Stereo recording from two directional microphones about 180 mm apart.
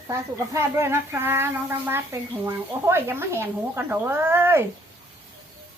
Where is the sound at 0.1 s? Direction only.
15° right (ahead or behind).